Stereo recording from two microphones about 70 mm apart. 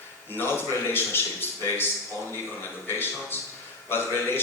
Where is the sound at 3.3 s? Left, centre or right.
Left.